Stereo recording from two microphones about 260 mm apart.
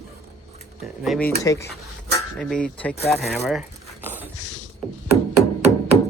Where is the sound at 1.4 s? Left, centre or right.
Centre.